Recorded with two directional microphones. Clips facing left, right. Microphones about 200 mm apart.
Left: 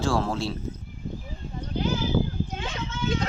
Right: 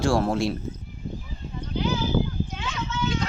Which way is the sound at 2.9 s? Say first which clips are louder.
Even; 55° left (ahead or behind).